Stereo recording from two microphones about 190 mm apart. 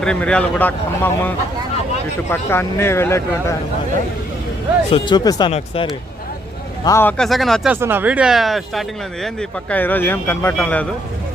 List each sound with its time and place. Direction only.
0.0 s speech: 5° left (ahead or behind)
2.3 s speech: 10° left (ahead or behind)
4.9 s speech: 25° left (ahead or behind)
6.8 s speech: 15° left (ahead or behind)
7.2 s speech: centre (ahead or behind)